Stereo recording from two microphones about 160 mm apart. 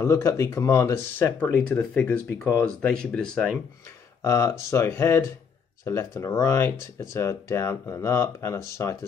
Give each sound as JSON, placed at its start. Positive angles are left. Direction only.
{"t": 0.0, "sound": "speech", "side_deg": 20}
{"t": 1.4, "sound": "speech", "side_deg": 10}
{"t": 4.2, "sound": "speech", "side_deg": 20}